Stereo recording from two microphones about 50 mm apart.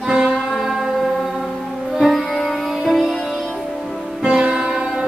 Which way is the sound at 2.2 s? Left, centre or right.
Centre.